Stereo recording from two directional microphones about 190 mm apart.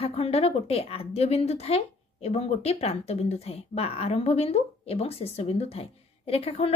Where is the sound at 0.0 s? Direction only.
30° left (ahead or behind).